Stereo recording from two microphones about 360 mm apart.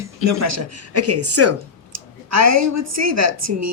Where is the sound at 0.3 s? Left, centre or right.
Right.